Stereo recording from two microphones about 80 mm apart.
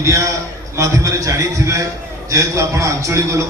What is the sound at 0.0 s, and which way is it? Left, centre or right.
A man's voice, right.